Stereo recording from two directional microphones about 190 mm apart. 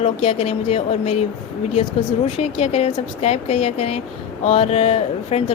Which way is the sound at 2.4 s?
30° left (ahead or behind).